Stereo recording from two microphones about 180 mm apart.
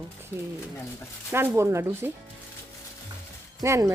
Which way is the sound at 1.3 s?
15° right (ahead or behind).